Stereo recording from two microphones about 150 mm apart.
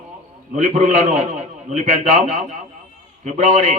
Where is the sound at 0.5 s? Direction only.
50° right (ahead or behind).